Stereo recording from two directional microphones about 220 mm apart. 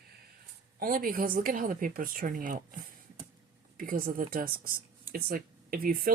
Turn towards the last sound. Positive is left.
turn(degrees=-40)  # may be behind; listen again after turning